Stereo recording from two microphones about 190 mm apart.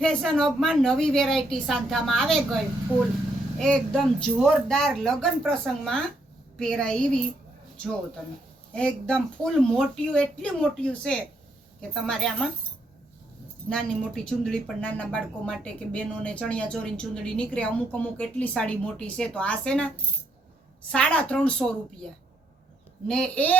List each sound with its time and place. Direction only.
0.0 s speech: 5° left (ahead or behind)
3.6 s speech: 5° left (ahead or behind)
8.7 s speech: 5° left (ahead or behind)
13.7 s speech: 5° left (ahead or behind)
20.9 s speech: 5° left (ahead or behind)
23.0 s speech: 5° left (ahead or behind)